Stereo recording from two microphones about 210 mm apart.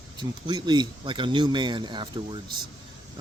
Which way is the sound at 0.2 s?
20° right (ahead or behind).